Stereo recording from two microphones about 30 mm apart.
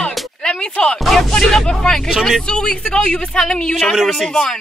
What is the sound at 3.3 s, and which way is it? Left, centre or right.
Speech, left.